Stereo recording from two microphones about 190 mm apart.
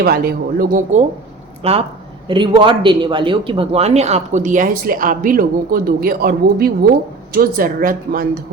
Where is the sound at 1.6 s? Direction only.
30° right (ahead or behind); by 8.3 s 50° right (ahead or behind).